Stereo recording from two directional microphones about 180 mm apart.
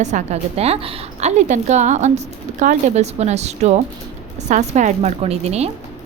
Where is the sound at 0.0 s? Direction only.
40° right (ahead or behind).